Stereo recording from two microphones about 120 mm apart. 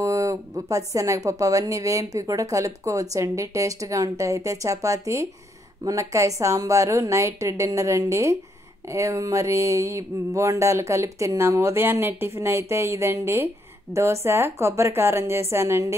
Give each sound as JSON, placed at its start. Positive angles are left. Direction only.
{"t": 0.0, "sound": "speech", "side_deg": -25}